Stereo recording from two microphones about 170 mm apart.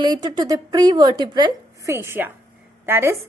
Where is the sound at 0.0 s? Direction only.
25° right (ahead or behind).